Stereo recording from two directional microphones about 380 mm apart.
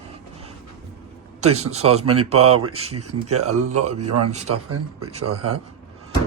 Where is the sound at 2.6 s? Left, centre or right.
Right.